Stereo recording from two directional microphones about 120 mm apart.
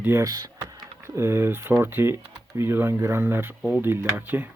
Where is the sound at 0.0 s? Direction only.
20° right (ahead or behind).